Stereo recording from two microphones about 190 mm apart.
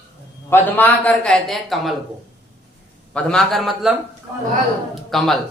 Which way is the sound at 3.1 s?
5° left (ahead or behind).